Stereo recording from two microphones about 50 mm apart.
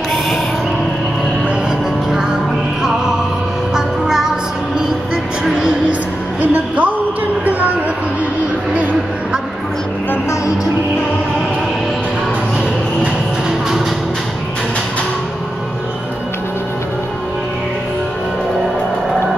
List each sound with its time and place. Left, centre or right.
3.7 s music: centre
6.4 s music: right